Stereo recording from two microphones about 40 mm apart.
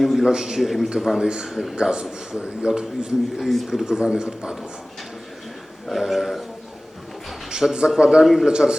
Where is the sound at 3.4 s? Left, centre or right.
Centre.